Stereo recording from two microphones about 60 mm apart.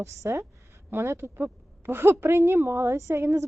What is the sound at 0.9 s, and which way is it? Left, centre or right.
A woman's voice, right.